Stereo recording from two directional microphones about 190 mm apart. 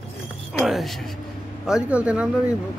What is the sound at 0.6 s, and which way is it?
Speech, centre (ahead or behind).